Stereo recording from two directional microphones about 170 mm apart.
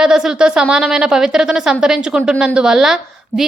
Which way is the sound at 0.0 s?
5° right (ahead or behind).